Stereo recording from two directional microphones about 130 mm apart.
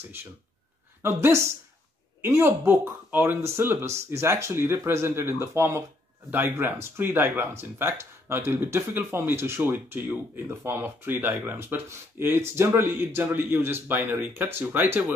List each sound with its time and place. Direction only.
1.0 s speech: 20° right (ahead or behind)